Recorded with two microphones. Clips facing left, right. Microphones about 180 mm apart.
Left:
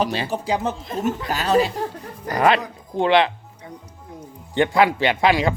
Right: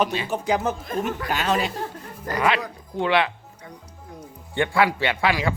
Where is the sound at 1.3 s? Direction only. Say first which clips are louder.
Left 6 dB; 35° left (ahead or behind).